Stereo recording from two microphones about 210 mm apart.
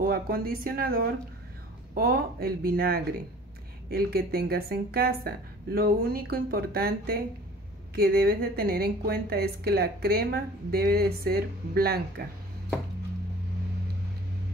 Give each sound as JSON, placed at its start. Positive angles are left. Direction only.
{"t": 0.0, "sound": "speech", "side_deg": -45}